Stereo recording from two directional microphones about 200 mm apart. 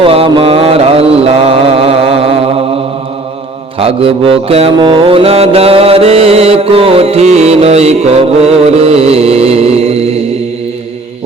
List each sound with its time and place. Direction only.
0.0 s mantra: 30° right (ahead or behind)
3.8 s mantra: 30° right (ahead or behind)